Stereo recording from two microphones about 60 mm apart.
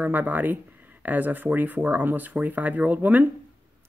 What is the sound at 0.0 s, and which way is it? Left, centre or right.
Speech, right.